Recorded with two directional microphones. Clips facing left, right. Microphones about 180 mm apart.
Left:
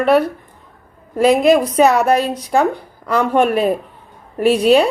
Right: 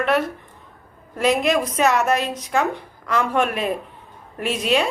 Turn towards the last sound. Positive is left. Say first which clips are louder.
# left 9 dB
turn(degrees=35)  # may be behind; listen again after turning